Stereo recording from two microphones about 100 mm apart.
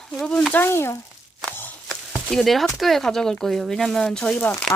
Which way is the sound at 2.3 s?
5° left (ahead or behind).